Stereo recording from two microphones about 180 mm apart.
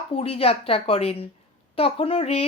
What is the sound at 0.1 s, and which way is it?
Speech, 35° left (ahead or behind).